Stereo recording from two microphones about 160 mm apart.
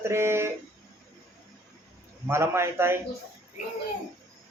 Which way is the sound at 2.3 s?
15° right (ahead or behind).